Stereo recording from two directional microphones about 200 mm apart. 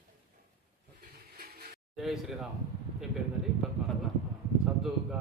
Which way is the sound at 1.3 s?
50° right (ahead or behind).